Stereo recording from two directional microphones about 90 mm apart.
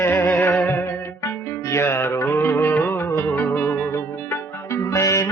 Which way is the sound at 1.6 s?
30° left (ahead or behind).